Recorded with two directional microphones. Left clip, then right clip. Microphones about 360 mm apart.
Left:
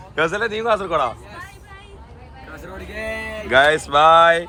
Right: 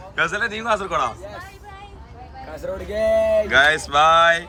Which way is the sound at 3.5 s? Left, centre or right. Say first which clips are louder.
Left 1 dB; centre.